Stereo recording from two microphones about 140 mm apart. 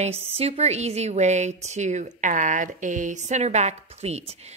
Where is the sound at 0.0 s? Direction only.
50° right (ahead or behind).